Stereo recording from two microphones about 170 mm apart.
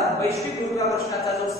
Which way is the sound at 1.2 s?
Centre (ahead or behind).